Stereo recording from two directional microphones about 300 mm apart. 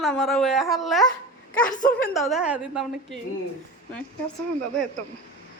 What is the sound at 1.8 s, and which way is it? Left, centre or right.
Speech, left.